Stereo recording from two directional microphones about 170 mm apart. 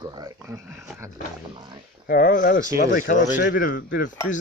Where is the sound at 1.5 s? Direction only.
25° right (ahead or behind).